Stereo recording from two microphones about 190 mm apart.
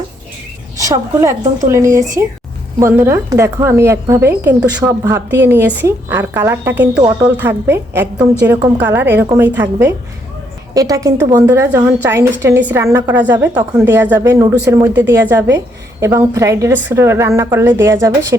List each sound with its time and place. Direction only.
0.9 s a woman's voice: 15° right (ahead or behind)